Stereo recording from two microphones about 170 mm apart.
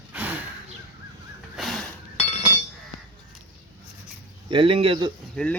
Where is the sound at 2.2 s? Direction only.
40° left (ahead or behind).